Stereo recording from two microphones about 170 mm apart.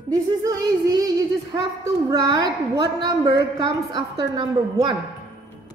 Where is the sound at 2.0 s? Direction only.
20° right (ahead or behind).